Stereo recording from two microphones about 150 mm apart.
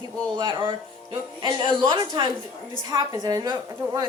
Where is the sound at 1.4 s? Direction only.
30° right (ahead or behind).